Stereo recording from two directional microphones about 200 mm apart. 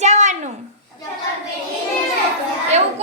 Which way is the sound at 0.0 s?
35° right (ahead or behind).